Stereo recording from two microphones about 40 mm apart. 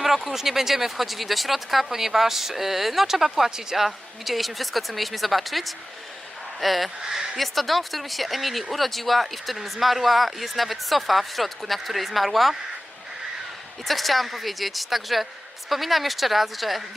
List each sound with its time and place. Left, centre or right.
0.3 s speech: centre
7.0 s speech: centre
7.3 s speech: centre
13.8 s speech: centre